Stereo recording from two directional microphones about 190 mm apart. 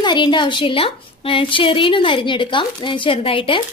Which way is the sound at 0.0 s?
25° left (ahead or behind).